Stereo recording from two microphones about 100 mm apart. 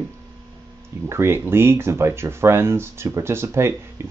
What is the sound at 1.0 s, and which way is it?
Speech, 25° right (ahead or behind).